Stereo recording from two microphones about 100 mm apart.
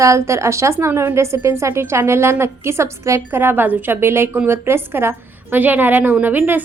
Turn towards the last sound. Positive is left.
turn(degrees=-20)  # may be behind; listen again after turning